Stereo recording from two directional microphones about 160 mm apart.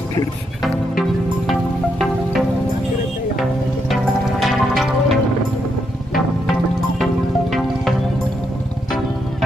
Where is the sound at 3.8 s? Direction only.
Centre (ahead or behind).